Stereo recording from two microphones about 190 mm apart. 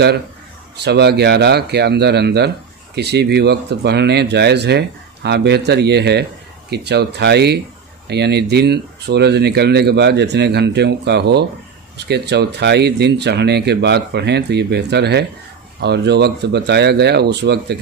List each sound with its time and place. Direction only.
0.7 s speech: 60° right (ahead or behind)